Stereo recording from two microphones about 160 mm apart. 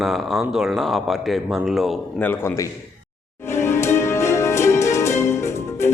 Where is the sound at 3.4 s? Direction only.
15° left (ahead or behind).